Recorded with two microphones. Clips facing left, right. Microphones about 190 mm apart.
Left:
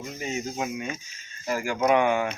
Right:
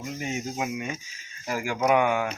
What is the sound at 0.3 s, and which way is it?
Speech, 5° right (ahead or behind).